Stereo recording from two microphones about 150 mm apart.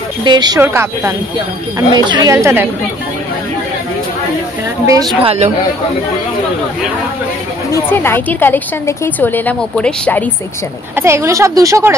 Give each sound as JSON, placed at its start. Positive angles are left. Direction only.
{"t": 0.2, "sound": "a woman's voice", "side_deg": -30}
{"t": 0.6, "sound": "speech", "side_deg": -15}
{"t": 1.8, "sound": "a woman's voice", "side_deg": -25}
{"t": 4.8, "sound": "a woman's voice", "side_deg": -25}
{"t": 5.2, "sound": "speech", "side_deg": -45}
{"t": 7.7, "sound": "a woman's voice", "side_deg": 15}
{"t": 11.0, "sound": "a woman's voice", "side_deg": -20}